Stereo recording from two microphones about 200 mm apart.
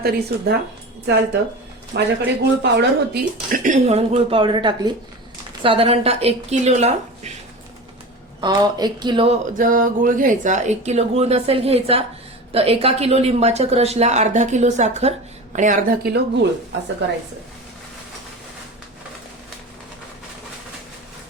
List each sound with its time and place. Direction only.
0.0 s speech: 50° right (ahead or behind)
1.9 s a woman's voice: 60° right (ahead or behind); by 7.3 s 35° right (ahead or behind)
8.4 s a woman's voice: 20° right (ahead or behind)
9.6 s speech: 45° right (ahead or behind)